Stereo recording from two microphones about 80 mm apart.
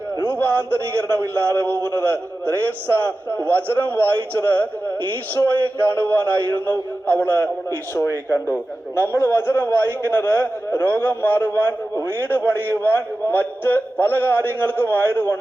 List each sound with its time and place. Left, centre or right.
0.2 s a sound: left
1.0 s a man's voice: left
2.9 s a man's voice: left
5.4 s speech: left
6.0 s a man's voice: left
9.0 s a man's voice: left